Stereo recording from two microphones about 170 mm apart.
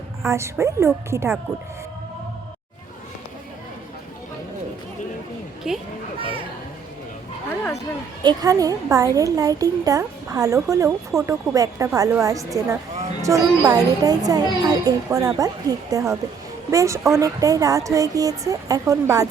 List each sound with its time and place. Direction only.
0.3 s a woman's voice: 15° right (ahead or behind)
5.7 s speech: centre (ahead or behind)
8.2 s a woman's voice: 25° right (ahead or behind)